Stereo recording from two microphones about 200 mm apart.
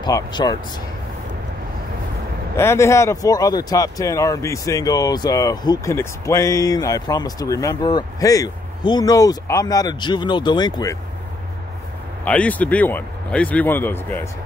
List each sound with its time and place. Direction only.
0.0 s speech: 20° left (ahead or behind)
2.5 s speech: 15° left (ahead or behind)
12.3 s speech: 5° left (ahead or behind)